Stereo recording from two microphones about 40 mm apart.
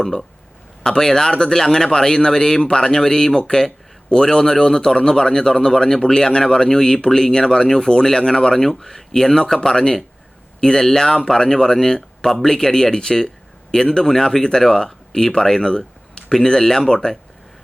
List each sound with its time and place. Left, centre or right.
0.9 s a man's voice: centre